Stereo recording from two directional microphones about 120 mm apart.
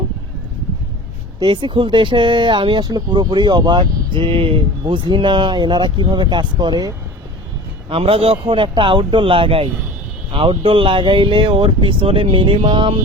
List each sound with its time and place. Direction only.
1.4 s speech: 45° right (ahead or behind)
7.9 s speech: 50° right (ahead or behind)